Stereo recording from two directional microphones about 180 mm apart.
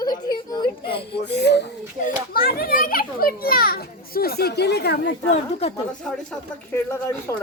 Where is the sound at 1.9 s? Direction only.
50° left (ahead or behind).